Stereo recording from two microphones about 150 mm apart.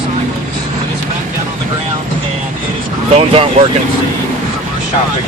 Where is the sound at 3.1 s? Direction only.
40° right (ahead or behind).